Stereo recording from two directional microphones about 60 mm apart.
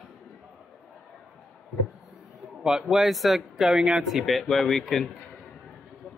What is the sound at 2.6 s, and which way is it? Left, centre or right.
Speech, centre.